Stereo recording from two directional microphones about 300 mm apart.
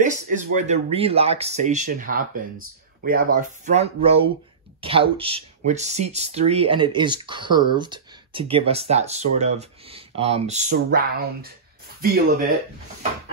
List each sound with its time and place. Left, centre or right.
0.0 s speech: right